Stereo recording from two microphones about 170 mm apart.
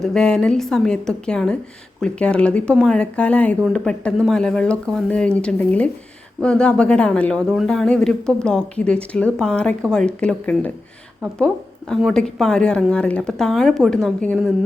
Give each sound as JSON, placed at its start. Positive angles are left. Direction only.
{"t": 0.0, "sound": "speech", "side_deg": 5}